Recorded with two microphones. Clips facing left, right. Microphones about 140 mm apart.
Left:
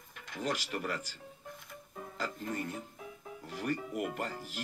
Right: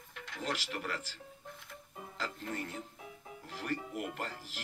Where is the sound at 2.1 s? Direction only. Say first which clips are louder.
Left 2 dB; 15° left (ahead or behind).